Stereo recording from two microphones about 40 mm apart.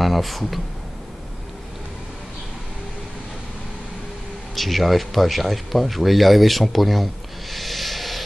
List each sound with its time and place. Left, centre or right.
0.0 s speech: centre
4.6 s speech: centre
7.5 s a sound: centre